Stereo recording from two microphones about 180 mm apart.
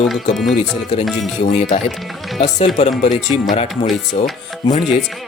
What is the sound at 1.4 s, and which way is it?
Speech, 40° left (ahead or behind).